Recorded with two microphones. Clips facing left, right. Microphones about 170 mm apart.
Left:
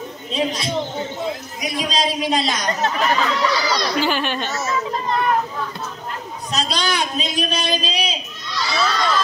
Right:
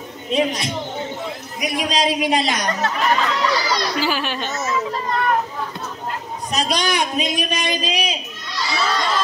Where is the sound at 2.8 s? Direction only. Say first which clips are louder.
Left 4 dB; 20° left (ahead or behind).